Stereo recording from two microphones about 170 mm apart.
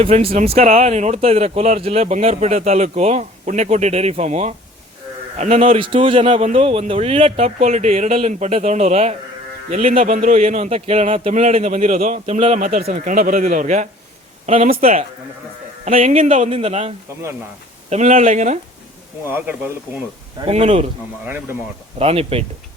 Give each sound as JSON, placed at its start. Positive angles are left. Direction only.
{"t": 0.0, "sound": "a man's voice", "side_deg": -35}
{"t": 15.8, "sound": "speech", "side_deg": -40}
{"t": 19.3, "sound": "speech", "side_deg": -10}
{"t": 20.5, "sound": "speech", "side_deg": -40}
{"t": 21.9, "sound": "speech", "side_deg": -35}